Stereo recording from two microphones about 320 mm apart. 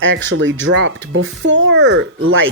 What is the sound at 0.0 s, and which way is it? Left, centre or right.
Speech, right.